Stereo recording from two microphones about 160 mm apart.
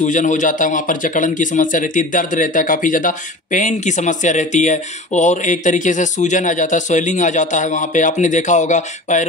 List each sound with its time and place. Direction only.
0.0 s speech: 50° left (ahead or behind)